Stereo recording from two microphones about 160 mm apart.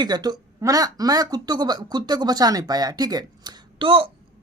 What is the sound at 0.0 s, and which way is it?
A woman's voice, 25° right (ahead or behind).